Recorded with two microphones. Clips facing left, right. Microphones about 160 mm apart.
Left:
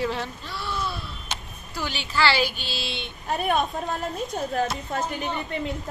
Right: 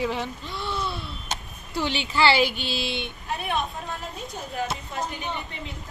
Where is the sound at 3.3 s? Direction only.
45° left (ahead or behind).